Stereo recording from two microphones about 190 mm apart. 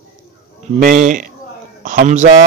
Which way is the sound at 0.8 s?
40° right (ahead or behind).